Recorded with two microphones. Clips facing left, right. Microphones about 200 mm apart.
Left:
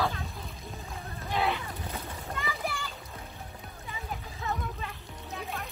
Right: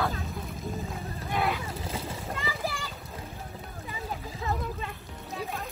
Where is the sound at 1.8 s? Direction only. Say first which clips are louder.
Right 4 dB; 30° right (ahead or behind).